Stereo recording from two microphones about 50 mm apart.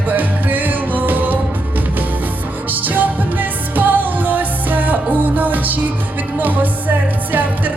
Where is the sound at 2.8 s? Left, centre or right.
Right.